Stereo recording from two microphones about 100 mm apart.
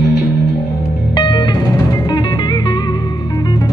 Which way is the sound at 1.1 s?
50° left (ahead or behind).